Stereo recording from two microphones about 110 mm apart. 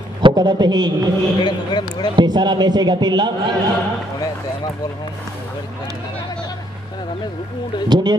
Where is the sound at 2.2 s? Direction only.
40° right (ahead or behind).